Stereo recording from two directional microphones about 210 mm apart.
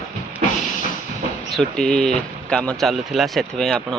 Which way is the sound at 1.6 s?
5° left (ahead or behind).